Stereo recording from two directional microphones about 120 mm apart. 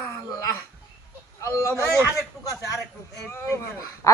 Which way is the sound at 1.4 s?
25° left (ahead or behind).